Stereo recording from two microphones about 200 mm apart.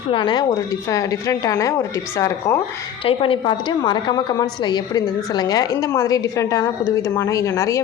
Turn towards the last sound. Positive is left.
turn(degrees=15)  # may be behind; listen again after turning